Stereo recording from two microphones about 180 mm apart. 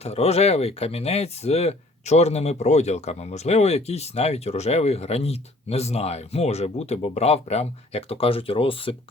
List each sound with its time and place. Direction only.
0.0 s speech: 35° left (ahead or behind)